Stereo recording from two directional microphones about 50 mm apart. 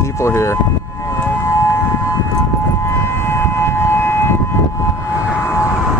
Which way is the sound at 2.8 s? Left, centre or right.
Left.